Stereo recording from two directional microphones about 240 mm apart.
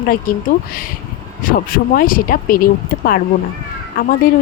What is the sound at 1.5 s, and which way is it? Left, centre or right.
Speech, left.